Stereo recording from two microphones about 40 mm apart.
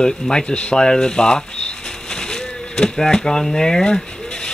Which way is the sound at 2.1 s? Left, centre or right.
Centre.